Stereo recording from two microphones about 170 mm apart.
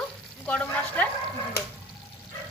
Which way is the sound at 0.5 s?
10° left (ahead or behind).